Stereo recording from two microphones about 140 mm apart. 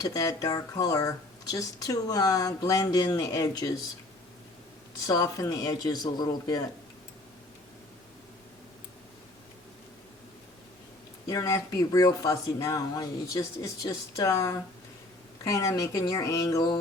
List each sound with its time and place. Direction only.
0.0 s a woman's voice: 25° left (ahead or behind)
5.0 s a woman's voice: 25° left (ahead or behind)
11.3 s a woman's voice: 20° left (ahead or behind)